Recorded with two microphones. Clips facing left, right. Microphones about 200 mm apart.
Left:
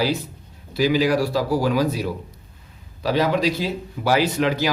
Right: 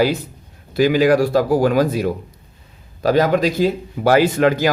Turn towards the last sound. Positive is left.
turn(degrees=-50)  # may be behind; listen again after turning